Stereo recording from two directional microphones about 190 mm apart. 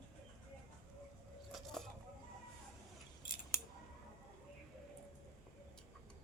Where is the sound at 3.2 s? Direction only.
25° left (ahead or behind).